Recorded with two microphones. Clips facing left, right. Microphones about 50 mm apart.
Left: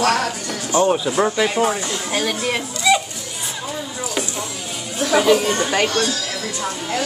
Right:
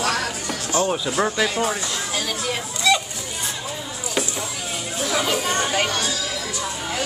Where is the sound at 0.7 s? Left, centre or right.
Centre.